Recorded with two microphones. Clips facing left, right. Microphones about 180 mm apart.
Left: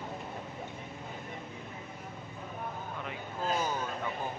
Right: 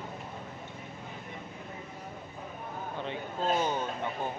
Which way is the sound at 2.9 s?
30° right (ahead or behind).